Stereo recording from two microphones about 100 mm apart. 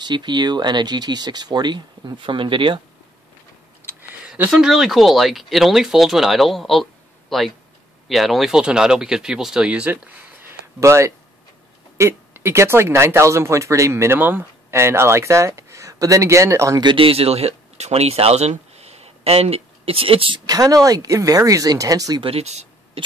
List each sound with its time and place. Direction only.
0.0 s speech: 50° right (ahead or behind)
3.8 s a sound: 20° right (ahead or behind)
4.5 s speech: 5° right (ahead or behind)
10.4 s a sound: 30° right (ahead or behind)
12.0 s speech: 25° right (ahead or behind)
16.8 s speech: 65° right (ahead or behind)
20.4 s speech: 35° right (ahead or behind)
22.2 s speech: 85° right